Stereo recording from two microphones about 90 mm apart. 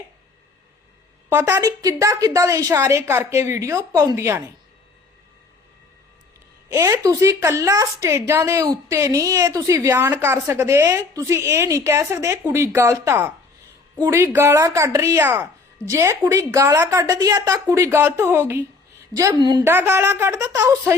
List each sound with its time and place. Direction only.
1.3 s speech: 25° right (ahead or behind)
1.6 s a woman's voice: 40° right (ahead or behind)
6.7 s a woman's voice: 40° right (ahead or behind)
9.9 s a woman's voice: 25° right (ahead or behind)
15.2 s a woman's voice: 25° right (ahead or behind)
17.0 s a woman's voice: 45° right (ahead or behind)
17.7 s speech: 30° right (ahead or behind)
19.3 s a woman's voice: 55° right (ahead or behind)
19.6 s speech: 25° right (ahead or behind)